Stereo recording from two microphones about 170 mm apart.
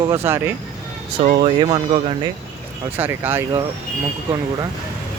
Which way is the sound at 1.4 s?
30° right (ahead or behind).